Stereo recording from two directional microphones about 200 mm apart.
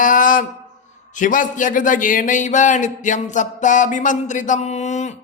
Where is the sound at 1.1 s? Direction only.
40° left (ahead or behind).